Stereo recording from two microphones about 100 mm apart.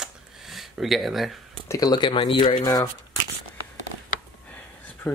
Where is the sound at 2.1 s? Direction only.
60° left (ahead or behind).